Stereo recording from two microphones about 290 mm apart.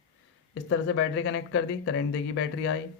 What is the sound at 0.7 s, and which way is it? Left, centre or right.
Speech, left.